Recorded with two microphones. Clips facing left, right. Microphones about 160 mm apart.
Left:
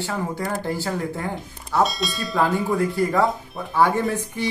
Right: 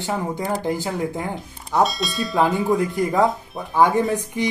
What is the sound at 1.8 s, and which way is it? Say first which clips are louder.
Speech: right 2 dB; centre (ahead or behind).